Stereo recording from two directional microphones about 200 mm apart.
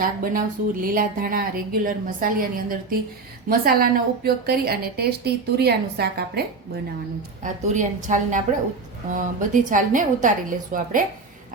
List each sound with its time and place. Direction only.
0.0 s a woman's voice: 45° right (ahead or behind)
7.4 s a woman's voice: 40° right (ahead or behind)